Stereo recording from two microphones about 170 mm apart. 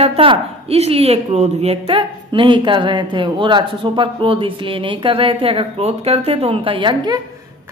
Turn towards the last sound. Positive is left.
turn(degrees=-25)  # may be behind; listen again after turning